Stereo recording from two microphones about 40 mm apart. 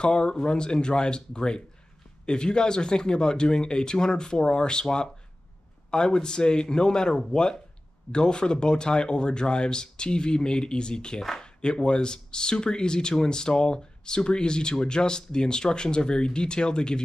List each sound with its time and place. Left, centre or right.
0.0 s speech: left